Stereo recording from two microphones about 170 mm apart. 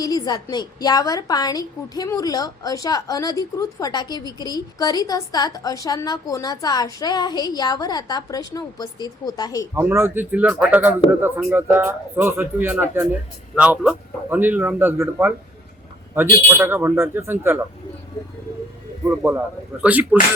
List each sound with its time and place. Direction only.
0.0 s a woman's voice: 20° left (ahead or behind)
9.7 s speech: 15° right (ahead or behind)
19.1 s speech: 15° right (ahead or behind)